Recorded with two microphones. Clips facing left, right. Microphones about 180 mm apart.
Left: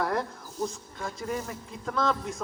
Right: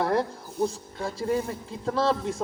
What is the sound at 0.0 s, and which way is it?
A man's voice, 30° right (ahead or behind).